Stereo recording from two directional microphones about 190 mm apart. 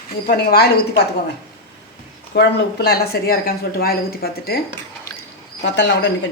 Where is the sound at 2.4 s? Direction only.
60° left (ahead or behind).